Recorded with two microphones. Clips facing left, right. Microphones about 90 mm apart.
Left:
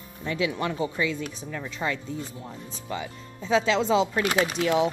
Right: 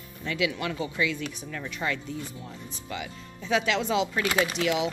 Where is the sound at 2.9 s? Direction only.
30° left (ahead or behind).